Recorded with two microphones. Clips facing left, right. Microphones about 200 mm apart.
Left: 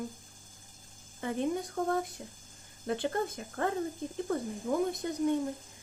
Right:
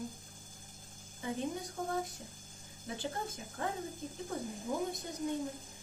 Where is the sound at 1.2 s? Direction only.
65° left (ahead or behind).